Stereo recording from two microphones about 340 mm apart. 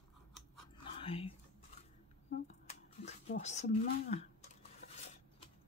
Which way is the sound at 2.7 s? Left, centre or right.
Centre.